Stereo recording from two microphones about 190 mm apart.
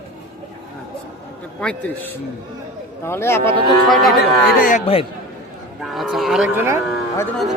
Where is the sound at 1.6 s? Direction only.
5° left (ahead or behind).